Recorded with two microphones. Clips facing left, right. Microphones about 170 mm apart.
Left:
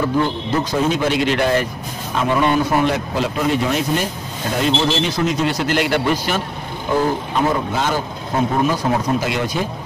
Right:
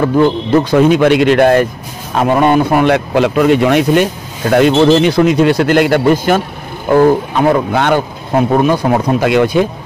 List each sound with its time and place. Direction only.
0.0 s speech: 60° right (ahead or behind)
6.9 s speech: 65° right (ahead or behind)